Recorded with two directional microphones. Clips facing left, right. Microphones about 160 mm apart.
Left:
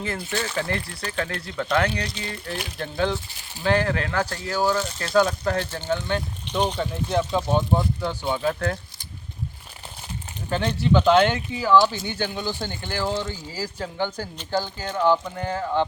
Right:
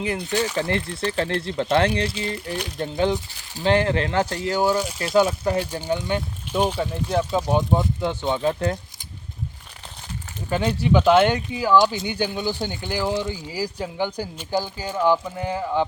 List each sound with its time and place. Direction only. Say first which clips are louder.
0.3 s speech: right 4 dB; 15° right (ahead or behind)
1.1 s speech: right 3 dB; 30° right (ahead or behind)
10.5 s speech: right 1 dB; 10° right (ahead or behind)